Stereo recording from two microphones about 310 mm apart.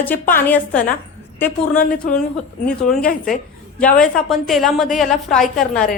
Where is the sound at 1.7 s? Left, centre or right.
Left.